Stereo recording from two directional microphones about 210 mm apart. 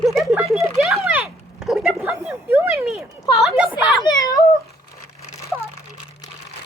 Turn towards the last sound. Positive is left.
turn(degrees=15)  # may be behind; listen again after turning